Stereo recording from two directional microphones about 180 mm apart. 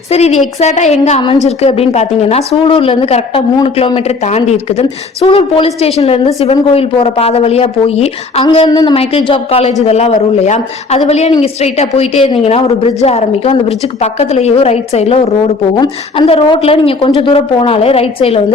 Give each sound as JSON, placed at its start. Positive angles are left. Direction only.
{"t": 0.1, "sound": "speech", "side_deg": 35}
{"t": 8.5, "sound": "speech", "side_deg": 25}